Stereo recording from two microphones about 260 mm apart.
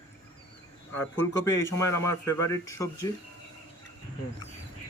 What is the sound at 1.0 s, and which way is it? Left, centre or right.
A man's voice, centre.